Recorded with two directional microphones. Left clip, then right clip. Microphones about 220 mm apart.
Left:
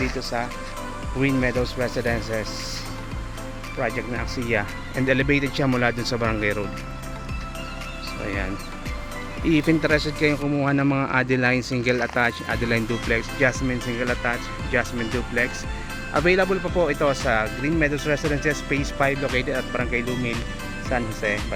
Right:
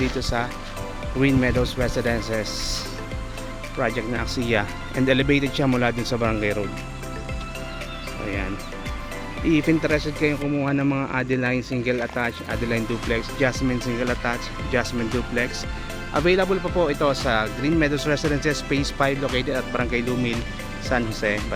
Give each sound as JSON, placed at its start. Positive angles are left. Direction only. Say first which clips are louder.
{"t": 0.0, "sound": "speech", "louder": "right 1 dB", "side_deg": -15}
{"t": 3.8, "sound": "speech", "louder": "right 2 dB", "side_deg": -15}
{"t": 9.4, "sound": "speech", "louder": "even", "side_deg": 0}
{"t": 16.1, "sound": "speech", "louder": "even", "side_deg": -5}